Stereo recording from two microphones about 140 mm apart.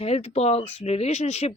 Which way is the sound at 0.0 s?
50° left (ahead or behind).